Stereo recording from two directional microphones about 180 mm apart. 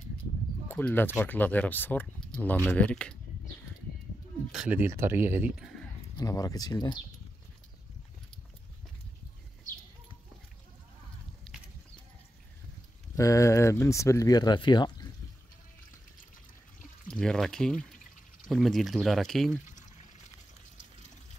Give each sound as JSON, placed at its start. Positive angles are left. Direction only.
{"t": 0.7, "sound": "speech", "side_deg": 10}
{"t": 4.5, "sound": "speech", "side_deg": -5}
{"t": 6.1, "sound": "speech", "side_deg": 20}
{"t": 11.5, "sound": "clip-clop", "side_deg": 0}
{"t": 13.1, "sound": "speech", "side_deg": 15}
{"t": 17.1, "sound": "speech", "side_deg": 5}